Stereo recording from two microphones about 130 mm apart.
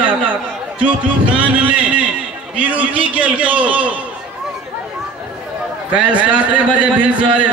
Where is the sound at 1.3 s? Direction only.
10° right (ahead or behind).